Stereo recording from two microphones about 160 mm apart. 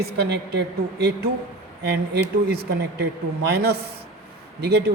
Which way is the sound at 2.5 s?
80° right.